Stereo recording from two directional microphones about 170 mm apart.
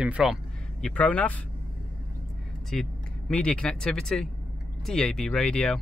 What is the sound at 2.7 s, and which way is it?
Speech, centre (ahead or behind).